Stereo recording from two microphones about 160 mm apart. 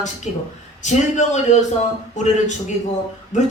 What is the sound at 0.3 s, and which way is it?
Speech, 50° left (ahead or behind).